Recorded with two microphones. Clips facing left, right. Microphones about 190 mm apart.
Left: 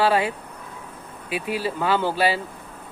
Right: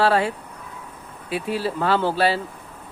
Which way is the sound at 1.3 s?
30° right (ahead or behind).